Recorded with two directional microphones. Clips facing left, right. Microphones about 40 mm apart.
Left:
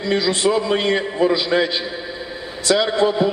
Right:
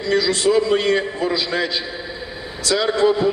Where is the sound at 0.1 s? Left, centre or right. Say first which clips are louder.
Right 1 dB; left.